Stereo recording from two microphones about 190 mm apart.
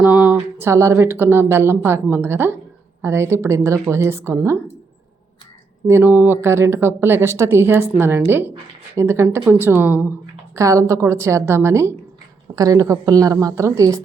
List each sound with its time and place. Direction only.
0.0 s speech: 5° right (ahead or behind)
5.9 s speech: 10° right (ahead or behind)